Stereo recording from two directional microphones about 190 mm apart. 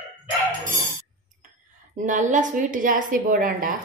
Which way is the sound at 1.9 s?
40° right (ahead or behind).